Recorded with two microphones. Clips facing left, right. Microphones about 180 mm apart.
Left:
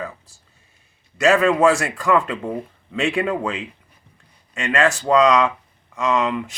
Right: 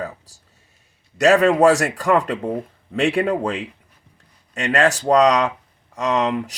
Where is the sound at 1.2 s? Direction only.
40° right (ahead or behind).